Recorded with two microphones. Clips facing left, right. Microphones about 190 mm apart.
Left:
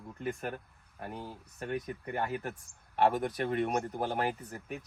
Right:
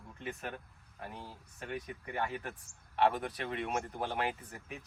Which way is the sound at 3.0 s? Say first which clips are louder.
Left 3 dB; 45° left (ahead or behind).